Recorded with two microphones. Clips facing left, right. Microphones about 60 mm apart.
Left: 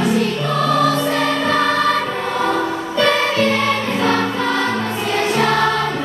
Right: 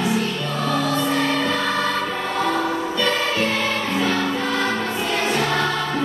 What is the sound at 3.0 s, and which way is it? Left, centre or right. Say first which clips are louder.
Music: left 7 dB; left.